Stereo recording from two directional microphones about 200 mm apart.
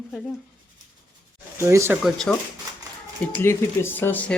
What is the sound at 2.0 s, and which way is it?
Speech, 5° left (ahead or behind).